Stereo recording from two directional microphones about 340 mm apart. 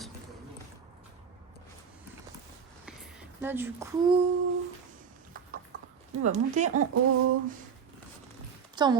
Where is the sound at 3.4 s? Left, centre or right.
Centre.